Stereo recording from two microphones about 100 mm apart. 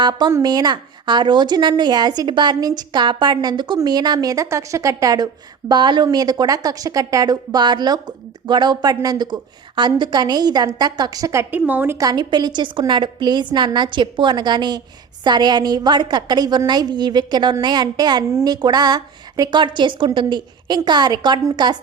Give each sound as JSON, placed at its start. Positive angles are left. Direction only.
{"t": 0.0, "sound": "a woman's voice", "side_deg": -45}
{"t": 11.5, "sound": "a woman's voice", "side_deg": -20}
{"t": 11.9, "sound": "a woman's voice", "side_deg": -45}